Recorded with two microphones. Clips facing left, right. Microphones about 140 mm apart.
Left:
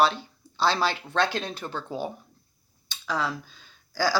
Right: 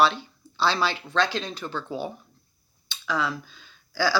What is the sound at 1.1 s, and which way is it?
Speech, 55° left (ahead or behind).